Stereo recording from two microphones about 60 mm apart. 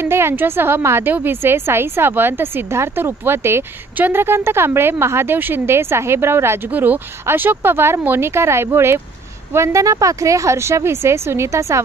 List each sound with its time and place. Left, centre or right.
0.0 s speech: right
6.7 s speech: right